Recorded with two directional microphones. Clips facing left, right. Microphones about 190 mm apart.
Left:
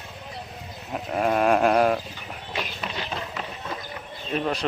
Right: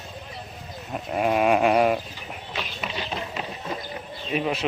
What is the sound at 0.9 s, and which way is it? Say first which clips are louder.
Speech: even; 5° right (ahead or behind).